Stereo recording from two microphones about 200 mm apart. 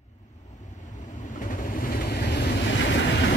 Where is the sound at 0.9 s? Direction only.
40° left (ahead or behind).